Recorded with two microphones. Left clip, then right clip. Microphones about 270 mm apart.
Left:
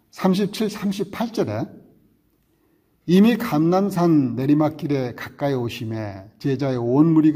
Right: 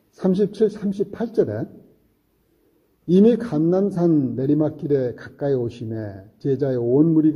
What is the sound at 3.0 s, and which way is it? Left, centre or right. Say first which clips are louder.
A man's voice: right 2 dB; left.